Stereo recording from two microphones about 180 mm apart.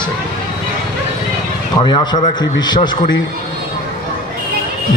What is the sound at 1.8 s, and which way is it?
A man's voice, 25° left (ahead or behind).